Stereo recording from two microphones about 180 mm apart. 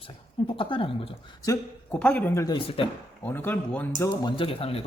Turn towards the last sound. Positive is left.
turn(degrees=30)  # may be behind; listen again after turning